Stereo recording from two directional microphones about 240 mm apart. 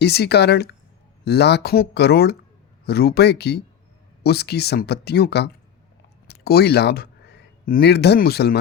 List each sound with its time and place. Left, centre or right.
0.0 s speech: left